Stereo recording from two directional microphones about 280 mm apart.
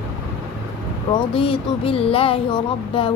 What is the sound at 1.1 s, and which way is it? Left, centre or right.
Speech, centre.